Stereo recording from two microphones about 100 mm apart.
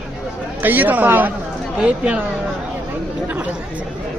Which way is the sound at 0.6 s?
20° right (ahead or behind).